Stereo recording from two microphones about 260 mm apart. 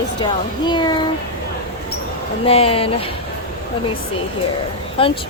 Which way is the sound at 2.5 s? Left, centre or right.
Left.